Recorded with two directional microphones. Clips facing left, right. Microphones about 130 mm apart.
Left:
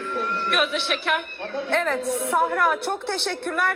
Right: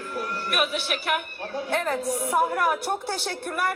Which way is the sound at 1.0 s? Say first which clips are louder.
Left 2 dB; 10° right (ahead or behind).